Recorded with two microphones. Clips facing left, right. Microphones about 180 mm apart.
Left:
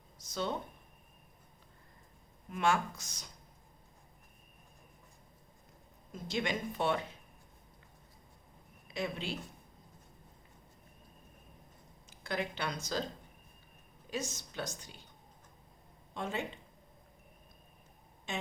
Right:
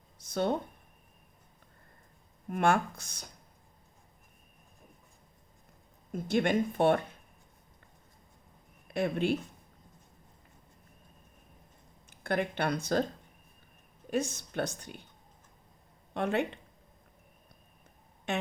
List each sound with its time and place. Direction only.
0.3 s speech: 55° right (ahead or behind)
2.5 s speech: 55° right (ahead or behind)
6.1 s speech: 55° right (ahead or behind)
8.9 s speech: 55° right (ahead or behind)
12.1 s speech: 55° right (ahead or behind)
14.1 s speech: 55° right (ahead or behind)
16.1 s speech: 65° right (ahead or behind)
18.3 s a sound: 65° right (ahead or behind)